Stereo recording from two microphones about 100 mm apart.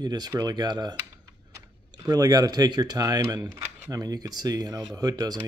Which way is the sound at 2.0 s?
40° right (ahead or behind).